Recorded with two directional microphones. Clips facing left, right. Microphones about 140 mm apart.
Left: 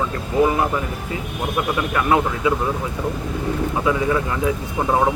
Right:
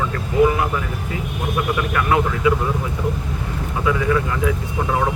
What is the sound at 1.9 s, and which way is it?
Speech, 20° left (ahead or behind).